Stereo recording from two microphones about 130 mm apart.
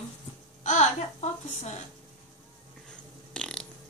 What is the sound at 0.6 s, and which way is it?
A woman's voice, 65° left (ahead or behind).